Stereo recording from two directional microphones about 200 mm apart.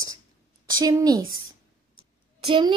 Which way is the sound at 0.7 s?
20° right (ahead or behind).